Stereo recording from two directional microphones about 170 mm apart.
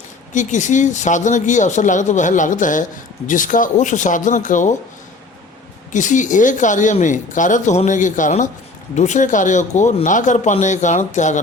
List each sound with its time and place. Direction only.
0.3 s speech: 45° left (ahead or behind)
5.9 s speech: 45° left (ahead or behind)